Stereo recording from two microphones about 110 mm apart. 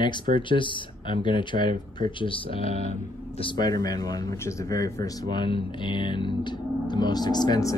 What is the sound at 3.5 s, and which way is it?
Speech, 40° left (ahead or behind).